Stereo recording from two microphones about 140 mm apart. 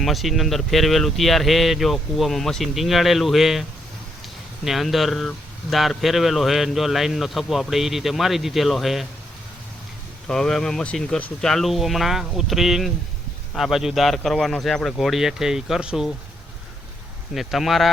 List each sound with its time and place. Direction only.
0.0 s speech: centre (ahead or behind)
10.2 s speech: 5° left (ahead or behind)
17.3 s speech: centre (ahead or behind)